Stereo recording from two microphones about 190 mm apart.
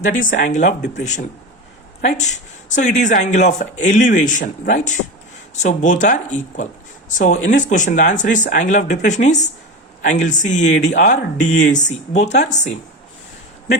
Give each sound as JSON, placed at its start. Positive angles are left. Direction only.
{"t": 0.0, "sound": "speech", "side_deg": 45}